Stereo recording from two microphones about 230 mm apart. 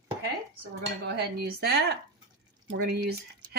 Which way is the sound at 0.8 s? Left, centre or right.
Right.